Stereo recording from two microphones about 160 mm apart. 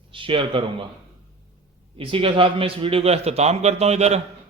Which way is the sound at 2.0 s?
35° right (ahead or behind).